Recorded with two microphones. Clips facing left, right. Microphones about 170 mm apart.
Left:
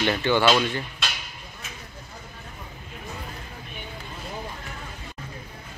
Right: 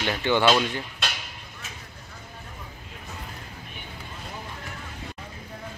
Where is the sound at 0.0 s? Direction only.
10° right (ahead or behind).